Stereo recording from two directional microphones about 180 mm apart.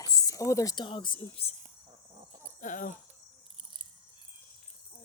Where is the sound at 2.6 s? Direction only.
45° left (ahead or behind).